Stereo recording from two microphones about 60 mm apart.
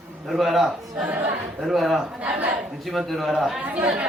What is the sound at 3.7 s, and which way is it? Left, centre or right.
Speech, right.